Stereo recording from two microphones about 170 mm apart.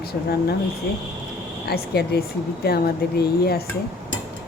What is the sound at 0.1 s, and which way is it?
Speech, 70° left (ahead or behind).